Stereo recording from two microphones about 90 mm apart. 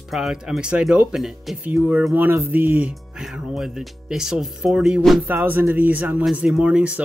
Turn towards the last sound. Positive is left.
turn(degrees=-10)  # may be behind; listen again after turning